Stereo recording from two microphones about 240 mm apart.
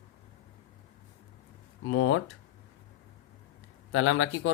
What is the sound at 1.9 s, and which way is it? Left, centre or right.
Speech, left.